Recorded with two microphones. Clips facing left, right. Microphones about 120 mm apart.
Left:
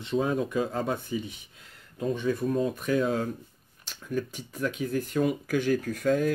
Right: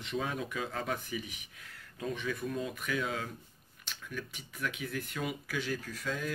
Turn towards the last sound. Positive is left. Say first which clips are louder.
# left 12 dB
turn(degrees=50)  # may be behind; listen again after turning